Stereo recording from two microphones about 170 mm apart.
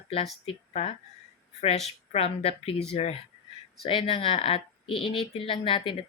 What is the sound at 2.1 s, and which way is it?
Speech, 35° left (ahead or behind).